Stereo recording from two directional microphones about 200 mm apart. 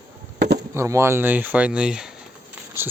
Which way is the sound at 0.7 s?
15° right (ahead or behind).